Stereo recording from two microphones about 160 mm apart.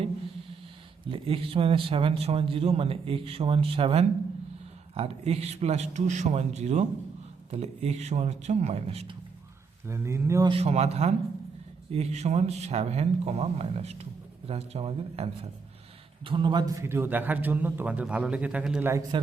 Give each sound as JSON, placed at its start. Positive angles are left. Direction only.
{"t": 1.1, "sound": "a man's voice", "side_deg": -35}
{"t": 9.8, "sound": "a man's voice", "side_deg": -15}
{"t": 10.5, "sound": "a man's voice", "side_deg": -40}
{"t": 16.8, "sound": "a man's voice", "side_deg": -15}
{"t": 19.1, "sound": "a man's voice", "side_deg": -30}